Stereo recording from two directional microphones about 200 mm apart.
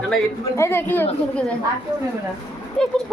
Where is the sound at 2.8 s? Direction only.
5° left (ahead or behind).